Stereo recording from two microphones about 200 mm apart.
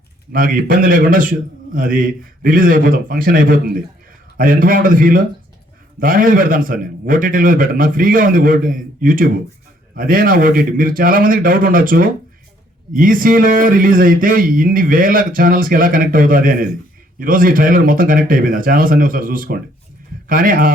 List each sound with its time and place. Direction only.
0.3 s speech: 45° right (ahead or behind)